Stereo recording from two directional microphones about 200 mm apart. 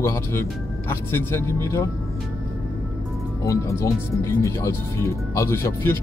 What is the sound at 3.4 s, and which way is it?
Speech, 15° left (ahead or behind).